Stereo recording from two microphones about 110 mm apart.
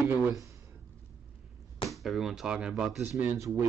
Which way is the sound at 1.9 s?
Centre (ahead or behind).